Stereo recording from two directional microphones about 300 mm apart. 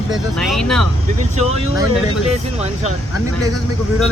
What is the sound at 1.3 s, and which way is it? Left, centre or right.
Speech, right.